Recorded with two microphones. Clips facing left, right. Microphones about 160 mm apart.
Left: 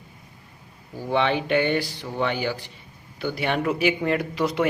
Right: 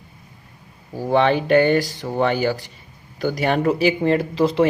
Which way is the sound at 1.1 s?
40° right (ahead or behind).